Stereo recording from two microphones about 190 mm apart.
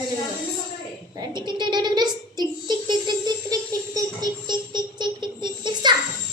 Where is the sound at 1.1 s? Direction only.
25° right (ahead or behind).